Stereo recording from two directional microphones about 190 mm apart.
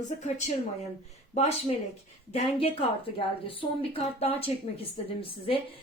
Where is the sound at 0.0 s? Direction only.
40° left (ahead or behind).